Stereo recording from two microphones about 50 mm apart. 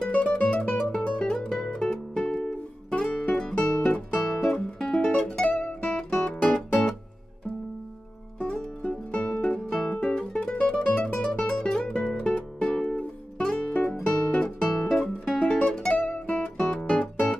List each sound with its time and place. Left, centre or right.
0.0 s music: left
4.3 s music: centre; by 6.9 s left
8.4 s music: left
14.7 s guitar: centre
15.4 s music: centre